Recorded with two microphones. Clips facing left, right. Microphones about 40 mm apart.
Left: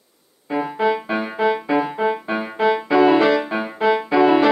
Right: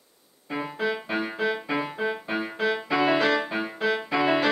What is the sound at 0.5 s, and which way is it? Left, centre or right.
Music, centre.